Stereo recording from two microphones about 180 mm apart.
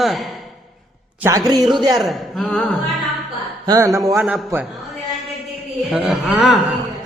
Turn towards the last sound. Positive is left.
turn(degrees=0)  # may be behind; listen again after turning